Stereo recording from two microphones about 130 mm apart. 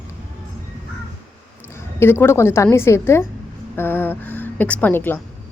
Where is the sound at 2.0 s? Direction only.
20° left (ahead or behind).